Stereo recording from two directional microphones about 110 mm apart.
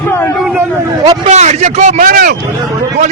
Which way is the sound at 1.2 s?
90° right.